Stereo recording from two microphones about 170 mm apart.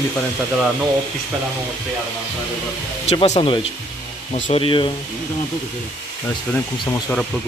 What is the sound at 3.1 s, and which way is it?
Speech, 35° left (ahead or behind).